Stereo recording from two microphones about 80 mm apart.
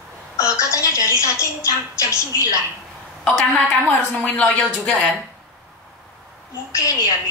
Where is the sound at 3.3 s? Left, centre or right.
Centre.